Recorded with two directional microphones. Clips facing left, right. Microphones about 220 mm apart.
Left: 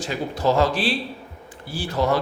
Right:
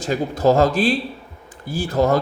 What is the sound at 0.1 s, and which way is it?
Speech, 45° right (ahead or behind).